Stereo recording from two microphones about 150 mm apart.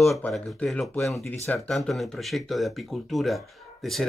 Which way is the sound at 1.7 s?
Centre (ahead or behind).